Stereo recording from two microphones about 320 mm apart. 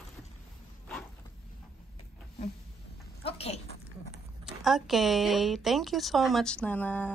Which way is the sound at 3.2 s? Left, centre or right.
Centre.